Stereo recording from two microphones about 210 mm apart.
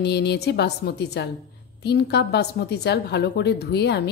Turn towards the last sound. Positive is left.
turn(degrees=50)  # may be behind; listen again after turning